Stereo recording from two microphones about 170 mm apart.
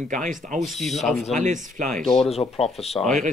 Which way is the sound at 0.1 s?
50° right (ahead or behind).